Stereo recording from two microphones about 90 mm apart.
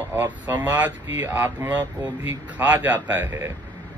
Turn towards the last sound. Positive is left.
turn(degrees=-25)  # may be behind; listen again after turning